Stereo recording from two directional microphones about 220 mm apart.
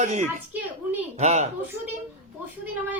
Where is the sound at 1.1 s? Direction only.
30° right (ahead or behind).